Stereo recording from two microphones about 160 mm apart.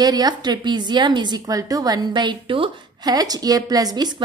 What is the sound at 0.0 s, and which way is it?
A woman's voice, 25° right (ahead or behind).